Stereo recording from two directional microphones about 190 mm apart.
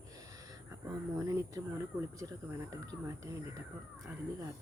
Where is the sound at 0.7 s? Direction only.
15° right (ahead or behind).